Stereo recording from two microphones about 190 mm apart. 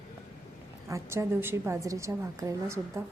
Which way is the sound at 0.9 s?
15° right (ahead or behind).